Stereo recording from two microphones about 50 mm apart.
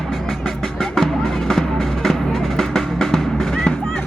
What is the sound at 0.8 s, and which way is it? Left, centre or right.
Music, centre.